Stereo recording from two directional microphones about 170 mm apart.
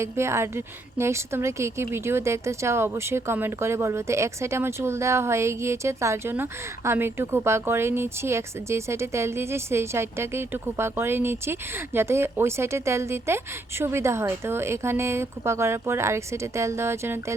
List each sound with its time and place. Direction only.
0.0 s a woman's voice: 15° right (ahead or behind)